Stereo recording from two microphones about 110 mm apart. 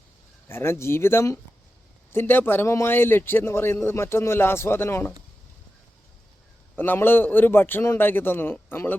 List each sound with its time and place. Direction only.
0.4 s speech: 25° left (ahead or behind)
6.7 s speech: 20° left (ahead or behind)